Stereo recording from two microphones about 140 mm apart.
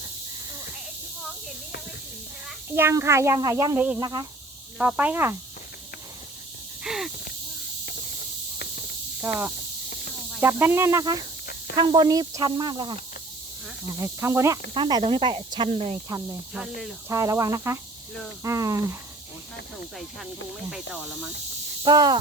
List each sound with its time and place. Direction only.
2.7 s speech: 15° right (ahead or behind)
3.8 s speech: 10° right (ahead or behind)
4.0 s speech: 30° right (ahead or behind)
4.8 s speech: 10° right (ahead or behind)
6.8 s a sound: centre (ahead or behind)
9.2 s speech: 15° right (ahead or behind); by 13.0 s 35° right (ahead or behind)
14.0 s speech: 20° right (ahead or behind)
14.7 s speech: 30° right (ahead or behind)
16.0 s speech: 25° right (ahead or behind)
20.7 s speech: 5° right (ahead or behind)
21.8 s speech: 30° right (ahead or behind)